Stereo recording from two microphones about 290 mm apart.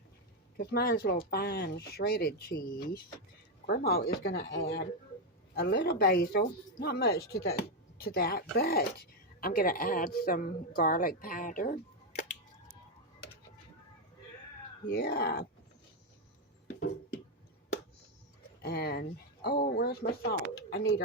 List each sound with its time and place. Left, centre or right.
0.5 s speech: left
14.8 s speech: left
18.6 s speech: left